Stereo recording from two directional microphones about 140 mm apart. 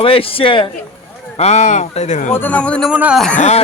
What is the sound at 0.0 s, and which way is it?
Speech, 40° left (ahead or behind).